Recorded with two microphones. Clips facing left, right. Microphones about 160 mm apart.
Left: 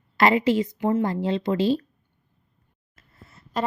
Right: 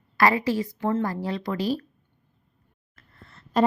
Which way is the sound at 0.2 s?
20° left (ahead or behind).